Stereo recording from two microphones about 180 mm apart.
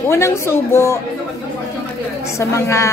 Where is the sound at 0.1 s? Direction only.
15° left (ahead or behind).